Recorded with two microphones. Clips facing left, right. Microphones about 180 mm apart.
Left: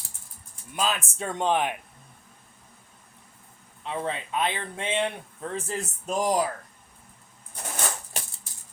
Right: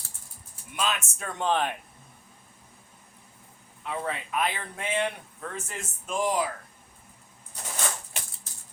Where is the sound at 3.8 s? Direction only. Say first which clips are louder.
Left 2 dB; 25° left (ahead or behind).